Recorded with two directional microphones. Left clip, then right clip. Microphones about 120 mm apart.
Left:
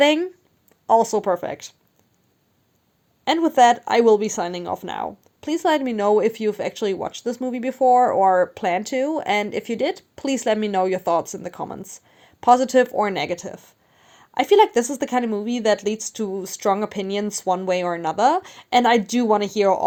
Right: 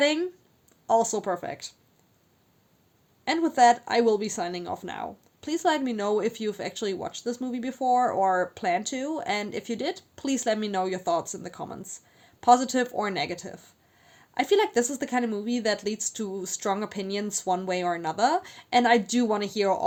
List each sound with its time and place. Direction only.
0.0 s speech: 45° left (ahead or behind)
3.2 s speech: 45° left (ahead or behind)